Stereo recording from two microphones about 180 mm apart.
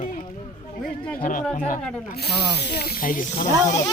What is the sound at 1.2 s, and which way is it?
Speech, 50° left (ahead or behind).